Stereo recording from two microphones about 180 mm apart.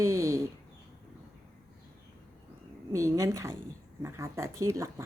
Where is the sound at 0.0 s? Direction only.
15° right (ahead or behind).